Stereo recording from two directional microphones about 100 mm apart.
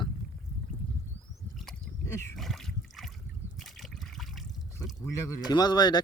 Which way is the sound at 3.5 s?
Centre (ahead or behind).